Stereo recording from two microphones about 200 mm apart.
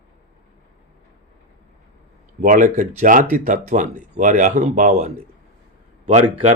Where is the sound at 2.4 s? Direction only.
40° right (ahead or behind).